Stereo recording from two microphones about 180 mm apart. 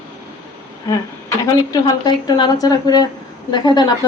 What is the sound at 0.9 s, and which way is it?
A man's voice, 20° left (ahead or behind).